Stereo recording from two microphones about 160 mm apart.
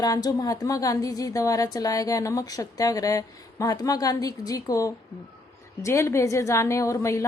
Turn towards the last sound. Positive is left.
turn(degrees=20)  # may be behind; listen again after turning